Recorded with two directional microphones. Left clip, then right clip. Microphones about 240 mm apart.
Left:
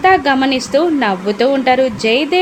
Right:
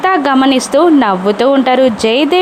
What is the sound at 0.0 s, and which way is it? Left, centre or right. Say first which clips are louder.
Speech: right 1 dB; centre.